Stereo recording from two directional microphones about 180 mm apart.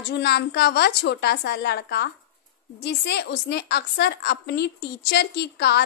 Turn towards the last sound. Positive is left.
turn(degrees=65)  # may be behind; listen again after turning